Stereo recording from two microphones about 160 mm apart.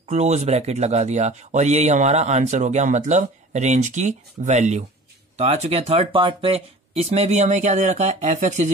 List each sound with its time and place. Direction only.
0.0 s speech: 45° right (ahead or behind)